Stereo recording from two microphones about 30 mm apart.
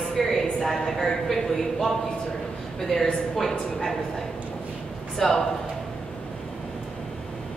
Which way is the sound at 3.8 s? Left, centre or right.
Centre.